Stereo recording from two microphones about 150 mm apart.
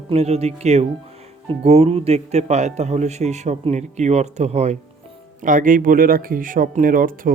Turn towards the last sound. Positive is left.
turn(degrees=-65)  # may be behind; listen again after turning